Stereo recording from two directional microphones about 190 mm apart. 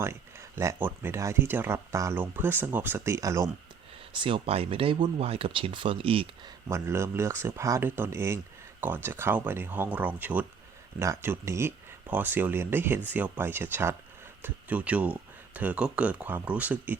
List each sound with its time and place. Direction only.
0.0 s speech: 15° right (ahead or behind)
4.2 s speech: 30° right (ahead or behind)
6.7 s speech: 15° right (ahead or behind)